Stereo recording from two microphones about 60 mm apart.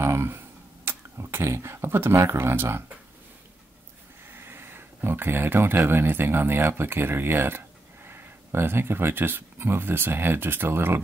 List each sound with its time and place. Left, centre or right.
0.0 s a sound: right
0.8 s speech: right
4.3 s speech: right